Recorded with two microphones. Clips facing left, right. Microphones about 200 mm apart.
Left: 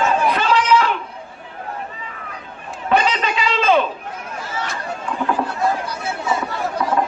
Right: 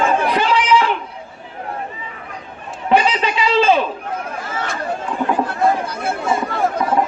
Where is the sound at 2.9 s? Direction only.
30° right (ahead or behind).